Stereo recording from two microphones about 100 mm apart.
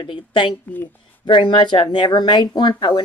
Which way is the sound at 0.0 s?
55° left (ahead or behind).